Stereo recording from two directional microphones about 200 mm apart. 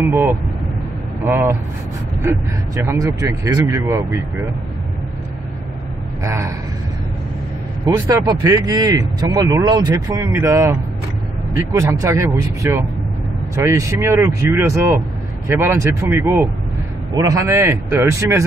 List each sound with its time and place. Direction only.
0.1 s speech: 15° right (ahead or behind)
6.2 s speech: 15° right (ahead or behind)
7.8 s speech: 20° right (ahead or behind)